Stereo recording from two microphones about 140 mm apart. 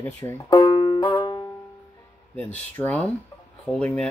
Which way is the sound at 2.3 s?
10° left (ahead or behind).